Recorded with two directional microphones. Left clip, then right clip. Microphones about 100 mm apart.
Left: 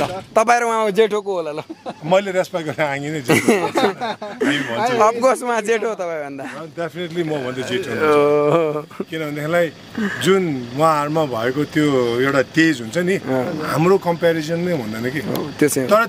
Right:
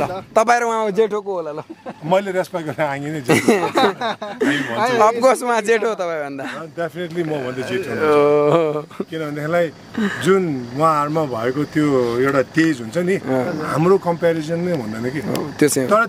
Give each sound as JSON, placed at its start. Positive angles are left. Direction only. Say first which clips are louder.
{"t": 0.0, "sound": "speech", "louder": "even", "side_deg": -10}
{"t": 2.0, "sound": "speech", "louder": "left 1 dB", "side_deg": -15}
{"t": 3.6, "sound": "speech", "louder": "right 2 dB", "side_deg": -45}
{"t": 4.4, "sound": "speech", "louder": "even", "side_deg": -15}
{"t": 6.8, "sound": "speech", "louder": "even", "side_deg": -5}
{"t": 9.1, "sound": "speech", "louder": "left 1 dB", "side_deg": 0}
{"t": 15.2, "sound": "speech", "louder": "right 2 dB", "side_deg": -10}